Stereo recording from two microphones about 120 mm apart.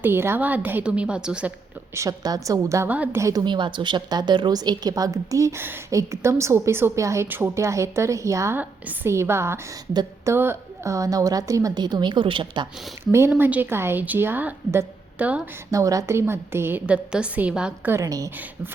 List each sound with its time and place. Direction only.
0.0 s a woman's voice: 20° right (ahead or behind)
2.0 s a woman's voice: 30° right (ahead or behind)
2.9 s a woman's voice: 10° right (ahead or behind)
3.2 s a woman's voice: 25° right (ahead or behind)
3.4 s a woman's voice: 40° right (ahead or behind)
13.1 s a woman's voice: 20° right (ahead or behind)
15.7 s a woman's voice: 30° right (ahead or behind); by 17.9 s 10° right (ahead or behind)
17.9 s a woman's voice: 30° right (ahead or behind)